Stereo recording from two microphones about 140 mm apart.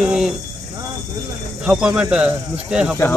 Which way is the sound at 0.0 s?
5° right (ahead or behind).